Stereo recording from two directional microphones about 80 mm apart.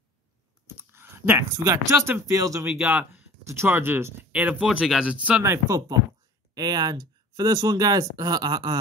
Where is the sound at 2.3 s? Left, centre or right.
Right.